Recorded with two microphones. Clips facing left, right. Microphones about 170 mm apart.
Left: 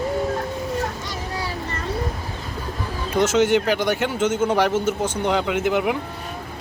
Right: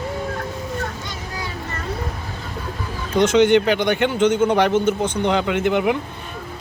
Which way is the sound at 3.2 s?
5° left (ahead or behind).